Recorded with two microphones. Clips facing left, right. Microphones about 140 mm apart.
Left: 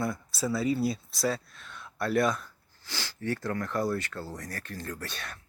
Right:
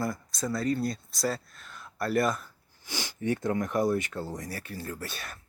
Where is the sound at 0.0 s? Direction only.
Centre (ahead or behind).